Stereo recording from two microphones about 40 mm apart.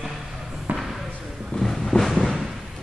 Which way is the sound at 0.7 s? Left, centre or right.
Centre.